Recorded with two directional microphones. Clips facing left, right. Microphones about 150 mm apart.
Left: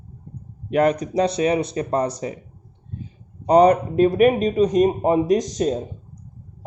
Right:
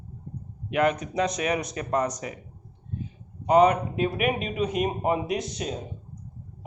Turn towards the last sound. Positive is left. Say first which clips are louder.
# left 10 dB
turn(degrees=40)  # may be behind; listen again after turning